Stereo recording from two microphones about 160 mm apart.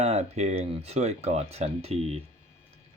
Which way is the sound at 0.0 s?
45° right (ahead or behind).